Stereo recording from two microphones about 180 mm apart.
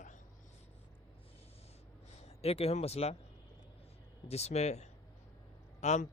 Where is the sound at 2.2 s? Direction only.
35° left (ahead or behind).